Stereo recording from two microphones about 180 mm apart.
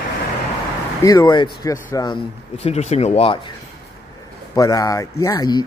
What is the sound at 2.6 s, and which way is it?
Speech, 35° left (ahead or behind).